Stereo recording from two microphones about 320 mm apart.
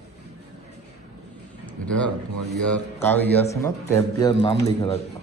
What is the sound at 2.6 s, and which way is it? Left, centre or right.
A man's voice, centre.